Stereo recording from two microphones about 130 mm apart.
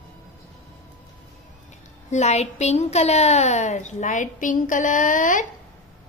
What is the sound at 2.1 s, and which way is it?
A woman's voice, 60° left (ahead or behind).